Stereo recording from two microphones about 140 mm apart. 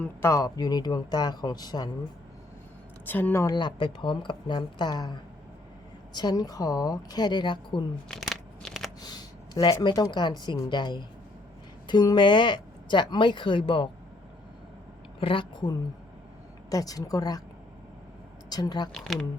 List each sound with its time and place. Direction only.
0.0 s speech: 20° left (ahead or behind)
3.1 s speech: 15° left (ahead or behind)
3.4 s speech: 35° left (ahead or behind)
6.1 s speech: 25° left (ahead or behind)
8.0 s a sound: centre (ahead or behind)
9.0 s speech: 30° left (ahead or behind)
15.2 s speech: 40° left (ahead or behind)
16.6 s speech: 25° left (ahead or behind)
18.4 s speech: 30° left (ahead or behind)
18.9 s speech: centre (ahead or behind)